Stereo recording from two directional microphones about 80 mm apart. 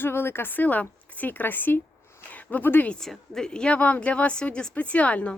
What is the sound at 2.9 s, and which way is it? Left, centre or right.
A woman's voice, centre.